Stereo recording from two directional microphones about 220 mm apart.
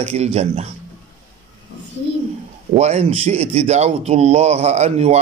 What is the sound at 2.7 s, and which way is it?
A man's voice, 30° right (ahead or behind).